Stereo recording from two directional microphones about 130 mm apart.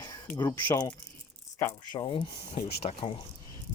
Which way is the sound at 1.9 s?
35° left (ahead or behind).